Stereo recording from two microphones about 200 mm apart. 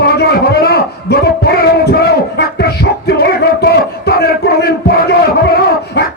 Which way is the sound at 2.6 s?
55° left (ahead or behind).